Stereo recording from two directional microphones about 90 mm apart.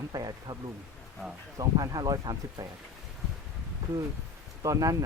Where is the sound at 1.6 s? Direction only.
45° right (ahead or behind).